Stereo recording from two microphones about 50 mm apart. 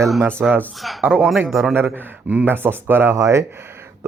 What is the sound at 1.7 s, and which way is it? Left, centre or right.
Speech, right.